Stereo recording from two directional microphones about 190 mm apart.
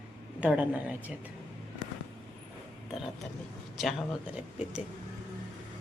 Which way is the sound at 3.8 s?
Centre (ahead or behind).